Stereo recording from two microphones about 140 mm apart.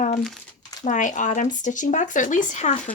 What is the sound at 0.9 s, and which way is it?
Speech, 65° left (ahead or behind).